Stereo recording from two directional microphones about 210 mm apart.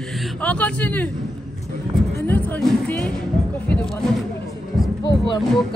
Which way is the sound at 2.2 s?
10° left (ahead or behind).